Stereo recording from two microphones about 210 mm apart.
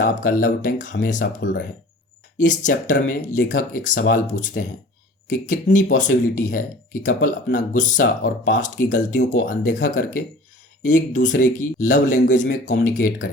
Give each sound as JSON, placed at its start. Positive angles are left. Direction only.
{"t": 0.0, "sound": "speech", "side_deg": 40}
{"t": 2.4, "sound": "speech", "side_deg": 35}
{"t": 5.7, "sound": "speech", "side_deg": 40}